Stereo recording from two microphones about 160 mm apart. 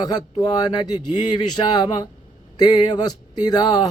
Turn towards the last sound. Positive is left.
turn(degrees=25)  # may be behind; listen again after turning